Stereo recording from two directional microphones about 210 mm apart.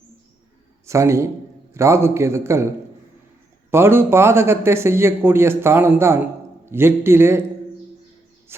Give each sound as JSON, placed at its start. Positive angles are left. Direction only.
{"t": 0.9, "sound": "a man's voice", "side_deg": -15}
{"t": 3.7, "sound": "a man's voice", "side_deg": -10}